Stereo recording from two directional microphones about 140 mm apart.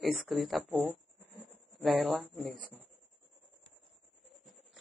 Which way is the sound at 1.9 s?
5° left (ahead or behind).